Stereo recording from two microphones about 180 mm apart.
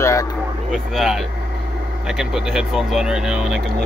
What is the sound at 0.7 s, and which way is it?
Speech, centre (ahead or behind).